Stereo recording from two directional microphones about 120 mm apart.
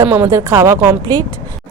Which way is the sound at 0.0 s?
20° right (ahead or behind).